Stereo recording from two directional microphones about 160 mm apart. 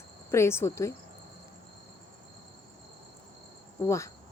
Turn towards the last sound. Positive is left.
turn(degrees=20)  # may be behind; listen again after turning